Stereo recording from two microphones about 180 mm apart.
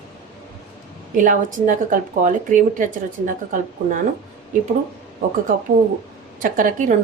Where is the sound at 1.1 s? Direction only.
45° right (ahead or behind).